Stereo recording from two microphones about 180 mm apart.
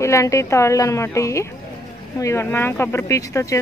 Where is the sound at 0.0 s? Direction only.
15° left (ahead or behind).